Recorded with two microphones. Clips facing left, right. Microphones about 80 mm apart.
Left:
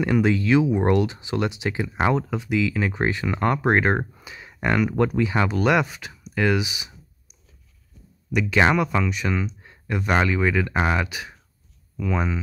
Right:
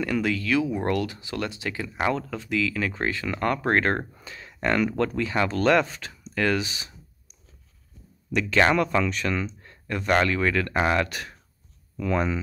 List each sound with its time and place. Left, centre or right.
0.0 s speech: left
8.3 s speech: centre